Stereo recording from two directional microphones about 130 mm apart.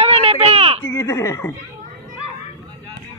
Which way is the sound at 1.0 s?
25° left (ahead or behind).